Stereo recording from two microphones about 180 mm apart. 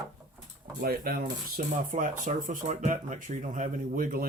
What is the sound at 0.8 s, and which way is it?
Speech, 55° right (ahead or behind).